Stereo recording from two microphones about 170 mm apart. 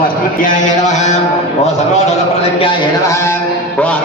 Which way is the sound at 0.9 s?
40° left (ahead or behind).